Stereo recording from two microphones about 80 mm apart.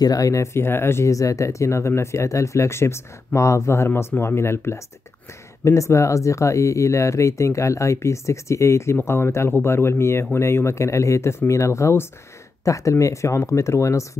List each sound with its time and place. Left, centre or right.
0.0 s speech: left